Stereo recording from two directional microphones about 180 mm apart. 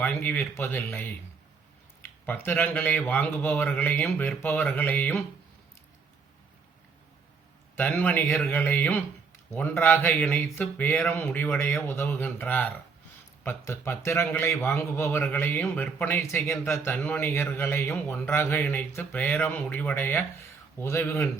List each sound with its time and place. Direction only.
0.0 s a man's voice: 10° left (ahead or behind)
2.2 s a man's voice: 10° left (ahead or behind)
7.8 s a man's voice: 10° left (ahead or behind)